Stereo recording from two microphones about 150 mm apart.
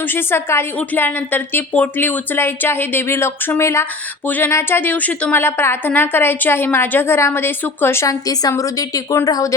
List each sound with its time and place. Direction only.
0.1 s a woman's voice: 15° left (ahead or behind)